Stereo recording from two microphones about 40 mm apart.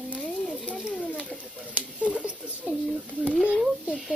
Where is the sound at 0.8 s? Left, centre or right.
Centre.